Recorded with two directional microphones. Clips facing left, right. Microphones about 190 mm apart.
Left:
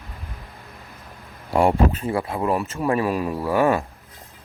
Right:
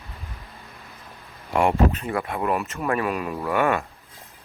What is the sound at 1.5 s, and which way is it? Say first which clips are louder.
Speech: left 2 dB; 30° left (ahead or behind).